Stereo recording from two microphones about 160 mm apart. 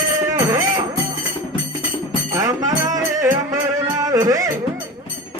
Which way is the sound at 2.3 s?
20° right (ahead or behind).